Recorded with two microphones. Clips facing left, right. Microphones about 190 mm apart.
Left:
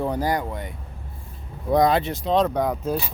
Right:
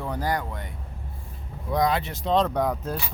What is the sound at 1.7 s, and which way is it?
Speech, 25° left (ahead or behind).